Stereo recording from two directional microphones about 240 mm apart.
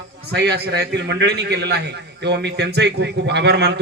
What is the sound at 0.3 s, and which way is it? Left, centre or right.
A man's voice, right.